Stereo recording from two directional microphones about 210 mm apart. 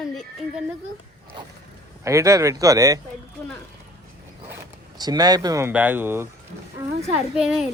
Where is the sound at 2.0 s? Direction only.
15° right (ahead or behind).